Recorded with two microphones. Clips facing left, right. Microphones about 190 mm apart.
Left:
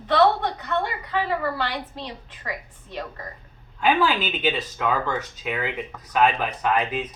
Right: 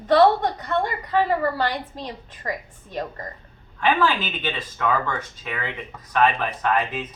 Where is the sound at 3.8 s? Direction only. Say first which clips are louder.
Even; 10° left (ahead or behind).